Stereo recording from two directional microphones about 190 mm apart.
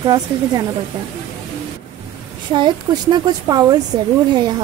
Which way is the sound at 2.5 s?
25° right (ahead or behind).